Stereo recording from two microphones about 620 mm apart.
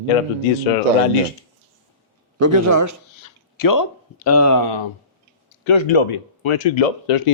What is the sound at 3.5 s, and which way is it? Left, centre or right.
Speech, left.